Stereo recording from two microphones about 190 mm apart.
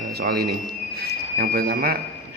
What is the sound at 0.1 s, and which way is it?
A man's voice, 55° right (ahead or behind).